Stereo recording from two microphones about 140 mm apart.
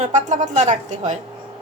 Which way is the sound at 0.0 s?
60° right (ahead or behind).